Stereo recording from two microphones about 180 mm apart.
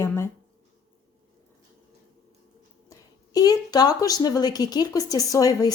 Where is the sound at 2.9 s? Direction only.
20° left (ahead or behind).